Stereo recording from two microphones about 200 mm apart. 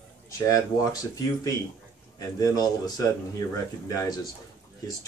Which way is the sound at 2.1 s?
20° left (ahead or behind).